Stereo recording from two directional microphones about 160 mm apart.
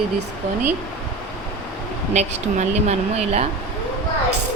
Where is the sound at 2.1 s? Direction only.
45° right (ahead or behind).